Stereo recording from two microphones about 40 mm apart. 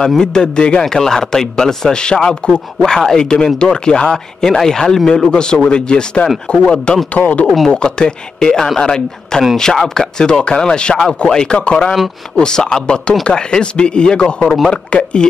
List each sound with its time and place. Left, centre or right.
0.0 s speech: centre
5.3 s speech: left
7.2 s speech: left
7.7 s speech: left